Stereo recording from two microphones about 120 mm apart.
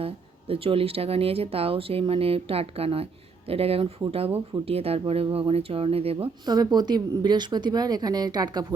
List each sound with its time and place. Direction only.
0.0 s speech: 50° right (ahead or behind)
6.4 s speech: 35° right (ahead or behind)